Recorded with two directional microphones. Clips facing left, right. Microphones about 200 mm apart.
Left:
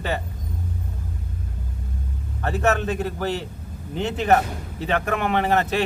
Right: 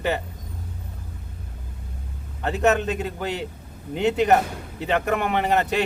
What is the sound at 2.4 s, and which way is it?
A man's voice, 20° right (ahead or behind).